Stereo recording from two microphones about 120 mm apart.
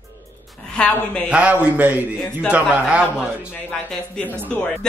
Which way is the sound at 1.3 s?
10° right (ahead or behind).